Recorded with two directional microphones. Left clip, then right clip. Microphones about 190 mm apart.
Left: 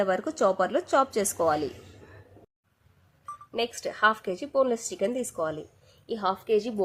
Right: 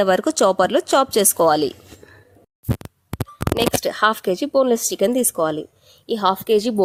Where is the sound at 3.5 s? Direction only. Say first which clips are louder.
Right 9 dB; 55° right (ahead or behind).